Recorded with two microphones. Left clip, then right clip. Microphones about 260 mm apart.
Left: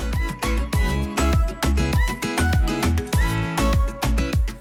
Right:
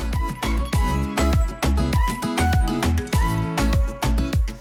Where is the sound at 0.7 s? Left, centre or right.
Centre.